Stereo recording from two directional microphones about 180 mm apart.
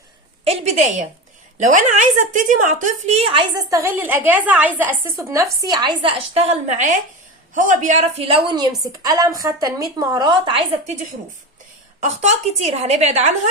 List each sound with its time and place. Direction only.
0.4 s a sound: 35° right (ahead or behind)
1.5 s a woman's voice: 40° right (ahead or behind)
3.7 s a woman's voice: 15° right (ahead or behind)
12.0 s a woman's voice: 40° right (ahead or behind)